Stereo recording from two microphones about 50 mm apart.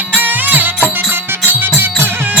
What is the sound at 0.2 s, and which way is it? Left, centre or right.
Music, right.